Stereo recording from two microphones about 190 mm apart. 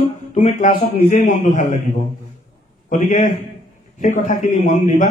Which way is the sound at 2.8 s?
45° left (ahead or behind).